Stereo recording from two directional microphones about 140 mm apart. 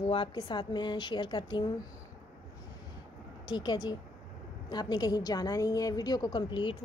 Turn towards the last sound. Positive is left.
turn(degrees=35)  # may be behind; listen again after turning